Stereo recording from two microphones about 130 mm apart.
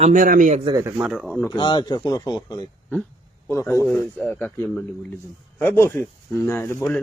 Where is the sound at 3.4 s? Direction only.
20° left (ahead or behind).